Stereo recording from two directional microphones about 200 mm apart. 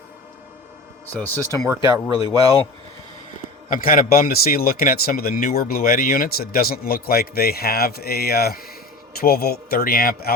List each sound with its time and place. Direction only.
1.5 s speech: 15° right (ahead or behind)
1.8 s a man's voice: 25° left (ahead or behind)
3.7 s a man's voice: 45° left (ahead or behind)